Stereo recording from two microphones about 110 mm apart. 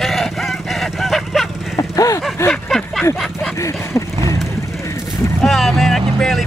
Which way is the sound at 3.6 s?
30° left (ahead or behind).